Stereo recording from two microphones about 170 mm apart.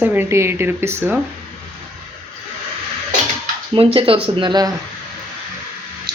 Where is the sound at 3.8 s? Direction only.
35° right (ahead or behind).